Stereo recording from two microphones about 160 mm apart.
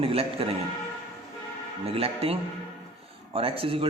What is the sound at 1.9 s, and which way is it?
Speech, 40° right (ahead or behind).